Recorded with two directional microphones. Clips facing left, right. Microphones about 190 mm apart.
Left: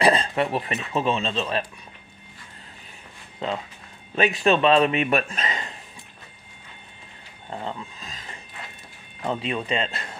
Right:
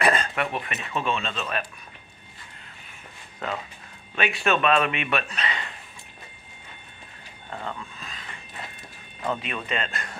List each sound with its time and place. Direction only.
0.0 s speech: 30° left (ahead or behind)
3.4 s speech: 25° left (ahead or behind)
4.1 s a man's voice: 40° left (ahead or behind)
7.4 s vehicle: 30° left (ahead or behind)
9.2 s speech: 25° left (ahead or behind)